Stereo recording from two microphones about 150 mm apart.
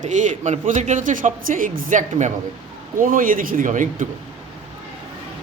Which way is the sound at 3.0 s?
65° right (ahead or behind).